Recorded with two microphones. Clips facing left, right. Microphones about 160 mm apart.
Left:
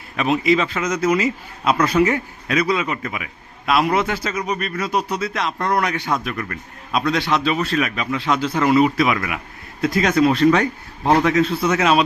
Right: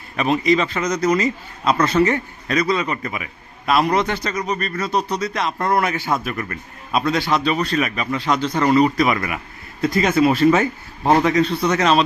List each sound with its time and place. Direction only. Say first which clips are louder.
0.2 s a man's voice: even; centre (ahead or behind)